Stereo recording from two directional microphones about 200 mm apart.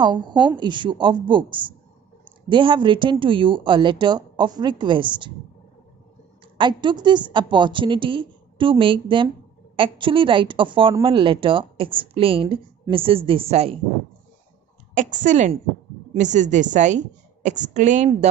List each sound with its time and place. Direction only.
0.0 s speech: 20° right (ahead or behind)
6.6 s speech: 25° right (ahead or behind)
15.0 s a woman's voice: 40° right (ahead or behind)